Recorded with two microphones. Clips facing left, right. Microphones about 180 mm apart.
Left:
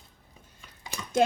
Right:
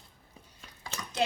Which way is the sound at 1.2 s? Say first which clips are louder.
Left 6 dB; 50° left (ahead or behind).